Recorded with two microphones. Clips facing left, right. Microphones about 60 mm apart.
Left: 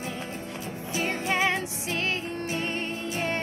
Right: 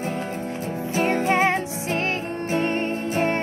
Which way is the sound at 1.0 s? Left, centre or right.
Right.